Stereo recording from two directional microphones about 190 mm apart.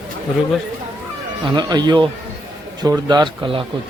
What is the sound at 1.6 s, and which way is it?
Speech, 20° right (ahead or behind).